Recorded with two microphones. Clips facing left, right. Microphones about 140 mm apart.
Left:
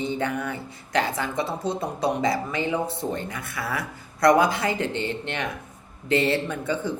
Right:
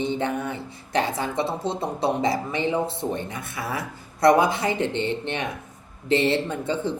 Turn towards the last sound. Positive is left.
turn(degrees=-25)  # may be behind; listen again after turning